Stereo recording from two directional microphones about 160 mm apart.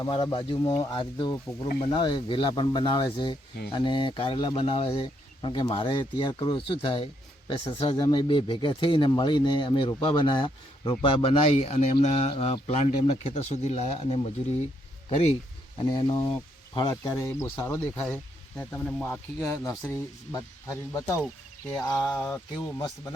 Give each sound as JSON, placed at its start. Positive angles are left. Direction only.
{"t": 0.0, "sound": "speech", "side_deg": 30}
{"t": 15.8, "sound": "speech", "side_deg": 25}